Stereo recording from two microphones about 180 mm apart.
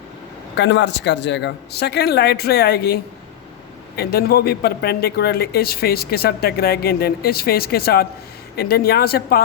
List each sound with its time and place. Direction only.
0.5 s speech: 75° left (ahead or behind); by 9.4 s 60° left (ahead or behind)